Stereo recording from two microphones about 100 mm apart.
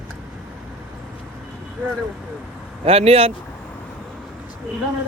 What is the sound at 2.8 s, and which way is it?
Speech, 80° right.